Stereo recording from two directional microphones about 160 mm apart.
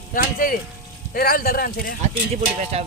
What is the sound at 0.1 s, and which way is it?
Speech, 60° left (ahead or behind).